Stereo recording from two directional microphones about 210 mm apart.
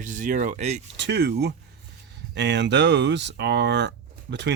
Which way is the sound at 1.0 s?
55° right (ahead or behind).